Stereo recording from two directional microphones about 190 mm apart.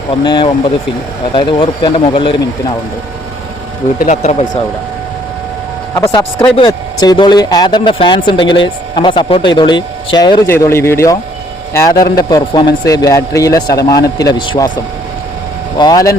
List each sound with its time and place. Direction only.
0.3 s speech: 25° left (ahead or behind)
3.9 s speech: 40° left (ahead or behind)
6.1 s a man's voice: 25° left (ahead or behind)
15.8 s speech: 20° left (ahead or behind)